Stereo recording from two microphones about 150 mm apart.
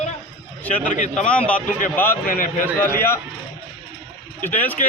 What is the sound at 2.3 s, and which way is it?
Speech, 65° left (ahead or behind).